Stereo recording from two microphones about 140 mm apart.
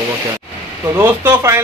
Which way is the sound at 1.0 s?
20° right (ahead or behind).